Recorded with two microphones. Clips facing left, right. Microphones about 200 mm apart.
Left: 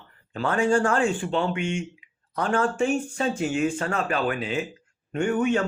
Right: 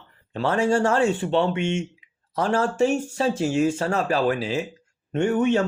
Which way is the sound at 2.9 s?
25° right (ahead or behind).